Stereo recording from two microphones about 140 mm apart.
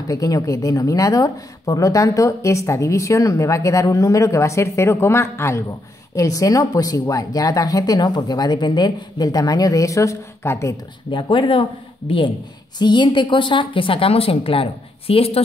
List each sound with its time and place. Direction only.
0.1 s a woman's voice: 25° left (ahead or behind)
11.1 s a woman's voice: 35° left (ahead or behind)
12.7 s a woman's voice: 30° left (ahead or behind)